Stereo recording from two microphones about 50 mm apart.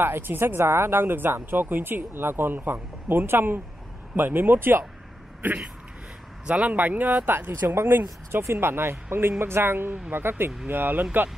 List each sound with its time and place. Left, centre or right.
0.0 s speech: right
0.6 s speech: right
6.4 s speech: right
7.6 s speech: right